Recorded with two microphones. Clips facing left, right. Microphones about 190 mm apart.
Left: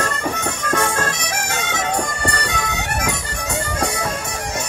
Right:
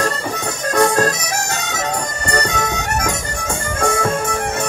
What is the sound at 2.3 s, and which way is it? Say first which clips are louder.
Bagpipes: right 5 dB; 45° right (ahead or behind).